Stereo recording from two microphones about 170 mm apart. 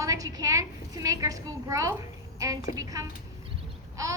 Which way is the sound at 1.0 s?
20° right (ahead or behind).